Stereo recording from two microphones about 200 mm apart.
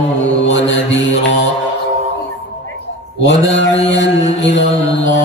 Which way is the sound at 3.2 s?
65° left (ahead or behind).